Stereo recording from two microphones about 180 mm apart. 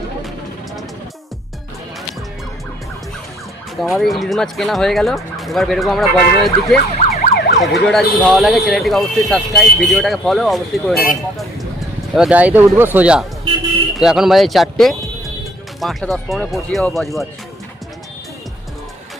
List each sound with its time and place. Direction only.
3.8 s speech: centre (ahead or behind)
7.2 s emergency vehicle: 60° left (ahead or behind)
7.6 s speech: centre (ahead or behind)